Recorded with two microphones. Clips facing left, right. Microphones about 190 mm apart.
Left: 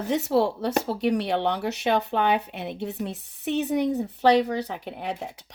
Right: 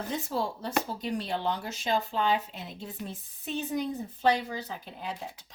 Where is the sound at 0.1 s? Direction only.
70° left (ahead or behind).